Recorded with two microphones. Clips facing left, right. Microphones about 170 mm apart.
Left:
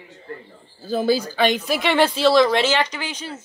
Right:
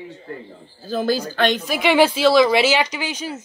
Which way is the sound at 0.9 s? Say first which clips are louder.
Left 1 dB; 10° left (ahead or behind).